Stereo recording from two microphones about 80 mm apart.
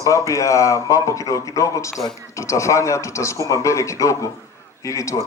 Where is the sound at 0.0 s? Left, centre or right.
Left.